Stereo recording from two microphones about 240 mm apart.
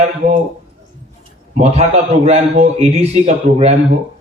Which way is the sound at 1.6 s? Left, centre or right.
Right.